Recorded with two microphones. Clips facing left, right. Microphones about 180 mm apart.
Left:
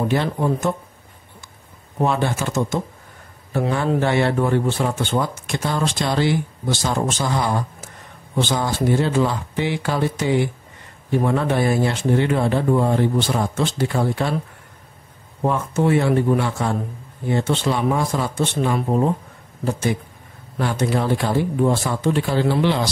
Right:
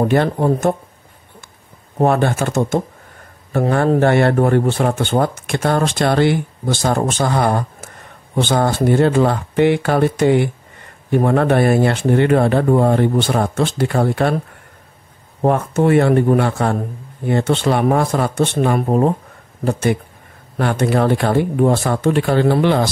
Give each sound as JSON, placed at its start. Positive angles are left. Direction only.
{"t": 0.0, "sound": "speech", "side_deg": -50}
{"t": 2.0, "sound": "speech", "side_deg": -55}
{"t": 15.4, "sound": "speech", "side_deg": -60}